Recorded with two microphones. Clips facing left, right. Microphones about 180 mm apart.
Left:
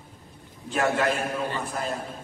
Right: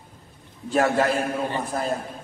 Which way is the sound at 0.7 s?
35° right (ahead or behind).